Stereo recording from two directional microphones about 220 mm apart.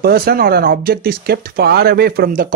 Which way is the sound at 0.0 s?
45° right (ahead or behind).